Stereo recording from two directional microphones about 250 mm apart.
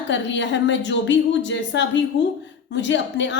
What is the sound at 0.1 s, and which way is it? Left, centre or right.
A woman's voice, left.